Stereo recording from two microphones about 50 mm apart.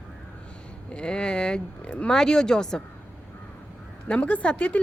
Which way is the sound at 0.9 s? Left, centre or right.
Centre.